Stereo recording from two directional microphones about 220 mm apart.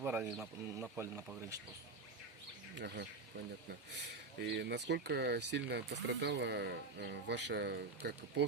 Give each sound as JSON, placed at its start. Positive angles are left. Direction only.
{"t": 0.0, "sound": "speech", "side_deg": -5}
{"t": 2.7, "sound": "speech", "side_deg": -45}